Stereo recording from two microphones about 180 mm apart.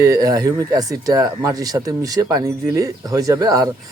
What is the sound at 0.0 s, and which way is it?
Speech, 20° right (ahead or behind).